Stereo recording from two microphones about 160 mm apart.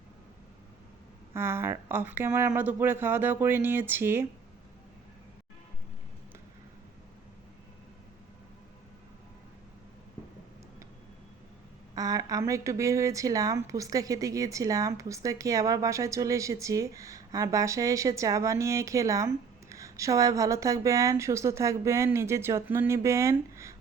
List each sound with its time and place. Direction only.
1.3 s a woman's voice: 15° right (ahead or behind)
11.9 s a woman's voice: 20° right (ahead or behind)